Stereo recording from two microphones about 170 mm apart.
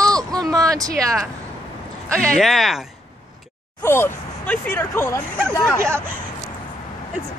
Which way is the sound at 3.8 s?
15° left (ahead or behind).